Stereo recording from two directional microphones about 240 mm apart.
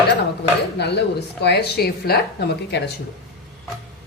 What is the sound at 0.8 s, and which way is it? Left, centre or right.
Speech, left.